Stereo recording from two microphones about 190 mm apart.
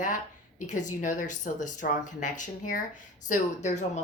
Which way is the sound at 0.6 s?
40° left (ahead or behind).